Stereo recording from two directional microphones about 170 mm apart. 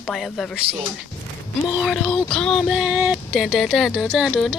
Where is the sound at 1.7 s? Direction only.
5° right (ahead or behind).